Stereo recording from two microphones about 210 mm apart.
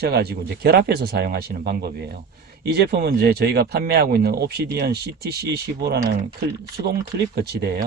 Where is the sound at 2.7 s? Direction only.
50° right (ahead or behind).